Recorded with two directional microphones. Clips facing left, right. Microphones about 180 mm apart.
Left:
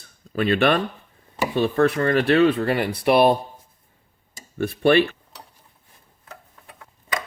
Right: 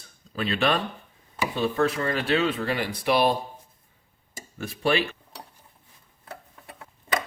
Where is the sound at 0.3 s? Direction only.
60° left (ahead or behind).